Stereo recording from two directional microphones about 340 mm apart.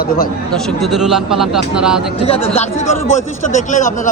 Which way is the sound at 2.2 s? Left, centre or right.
Centre.